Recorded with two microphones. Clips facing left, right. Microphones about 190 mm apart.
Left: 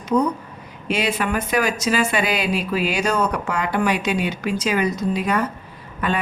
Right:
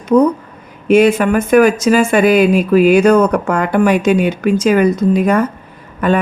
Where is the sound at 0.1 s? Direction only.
90° right.